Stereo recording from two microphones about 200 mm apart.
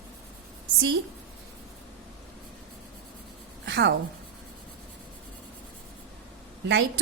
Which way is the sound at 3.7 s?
60° right (ahead or behind).